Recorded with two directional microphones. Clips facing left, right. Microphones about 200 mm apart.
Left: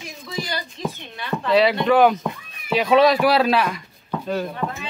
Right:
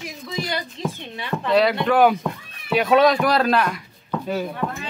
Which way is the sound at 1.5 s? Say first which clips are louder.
Left 1 dB; centre (ahead or behind).